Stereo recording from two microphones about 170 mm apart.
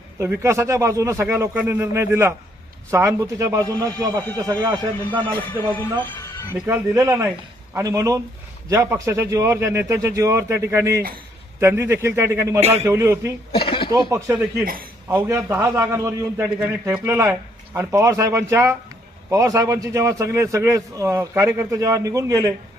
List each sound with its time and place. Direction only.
0.2 s a man's voice: 15° right (ahead or behind)
5.2 s music: 10° left (ahead or behind)
6.5 s a man's voice: 15° right (ahead or behind)
13.7 s a sound: 30° left (ahead or behind)
13.9 s a man's voice: 20° right (ahead or behind)
14.6 s a man's voice: 60° right (ahead or behind)
15.0 s a man's voice: 15° right (ahead or behind)